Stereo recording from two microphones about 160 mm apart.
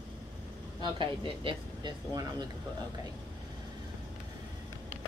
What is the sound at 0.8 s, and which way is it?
Speech, 30° right (ahead or behind).